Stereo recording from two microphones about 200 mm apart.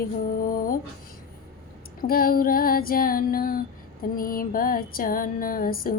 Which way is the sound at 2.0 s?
45° left (ahead or behind).